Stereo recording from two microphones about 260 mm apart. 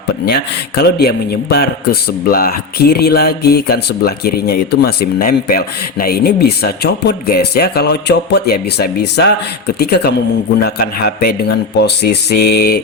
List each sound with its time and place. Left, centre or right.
0.3 s a man's voice: left